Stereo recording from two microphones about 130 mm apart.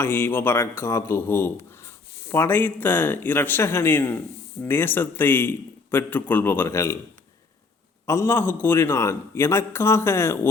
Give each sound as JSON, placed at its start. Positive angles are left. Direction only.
{"t": 0.0, "sound": "a man's voice", "side_deg": 15}
{"t": 8.0, "sound": "a man's voice", "side_deg": 20}